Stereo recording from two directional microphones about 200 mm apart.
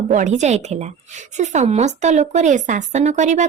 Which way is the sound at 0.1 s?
35° right (ahead or behind).